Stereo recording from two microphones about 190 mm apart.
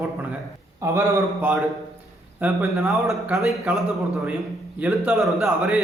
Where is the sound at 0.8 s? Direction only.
15° right (ahead or behind).